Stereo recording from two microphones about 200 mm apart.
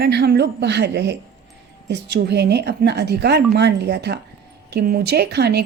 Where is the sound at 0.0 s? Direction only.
55° right (ahead or behind).